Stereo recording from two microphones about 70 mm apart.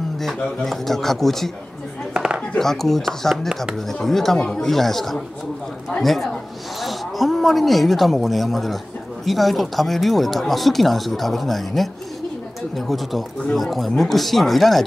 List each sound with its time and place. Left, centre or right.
0.2 s speech: centre
2.1 s chopping: centre
2.5 s speech: centre